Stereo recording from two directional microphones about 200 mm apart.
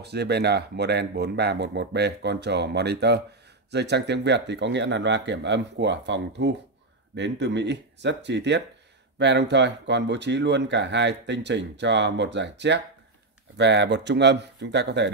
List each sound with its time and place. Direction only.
0.0 s speech: 55° right (ahead or behind)